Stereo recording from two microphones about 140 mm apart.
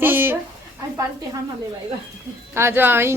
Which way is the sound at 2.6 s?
15° right (ahead or behind).